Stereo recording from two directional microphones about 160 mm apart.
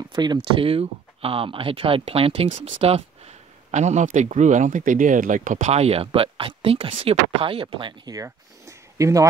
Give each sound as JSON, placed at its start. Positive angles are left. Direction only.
{"t": 0.1, "sound": "speech", "side_deg": -25}